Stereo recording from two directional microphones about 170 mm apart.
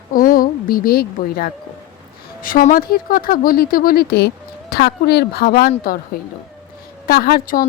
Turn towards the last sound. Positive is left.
turn(degrees=60)  # may be behind; listen again after turning